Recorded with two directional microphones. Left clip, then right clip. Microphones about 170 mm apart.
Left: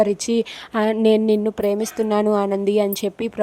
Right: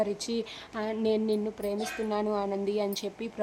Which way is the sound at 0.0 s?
45° left (ahead or behind).